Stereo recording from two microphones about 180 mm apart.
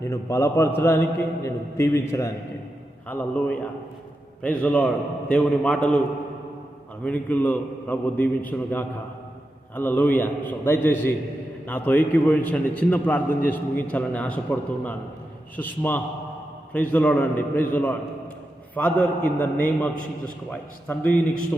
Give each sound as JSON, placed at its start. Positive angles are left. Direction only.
{"t": 0.0, "sound": "a man's voice", "side_deg": 15}
{"t": 7.0, "sound": "a man's voice", "side_deg": 10}